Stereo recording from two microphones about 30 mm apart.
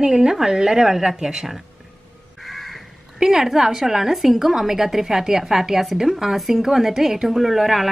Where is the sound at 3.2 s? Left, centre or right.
Centre.